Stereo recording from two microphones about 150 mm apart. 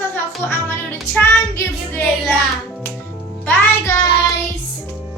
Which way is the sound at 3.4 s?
10° left (ahead or behind).